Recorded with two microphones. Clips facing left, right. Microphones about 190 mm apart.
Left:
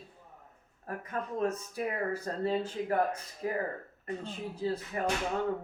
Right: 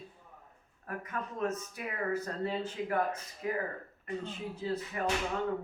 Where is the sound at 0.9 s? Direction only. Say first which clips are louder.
Left 3 dB; 35° left (ahead or behind).